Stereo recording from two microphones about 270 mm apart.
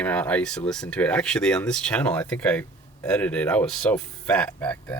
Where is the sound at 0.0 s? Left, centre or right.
Centre.